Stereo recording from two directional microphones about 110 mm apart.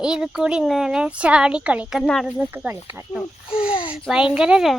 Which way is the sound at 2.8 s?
25° right (ahead or behind).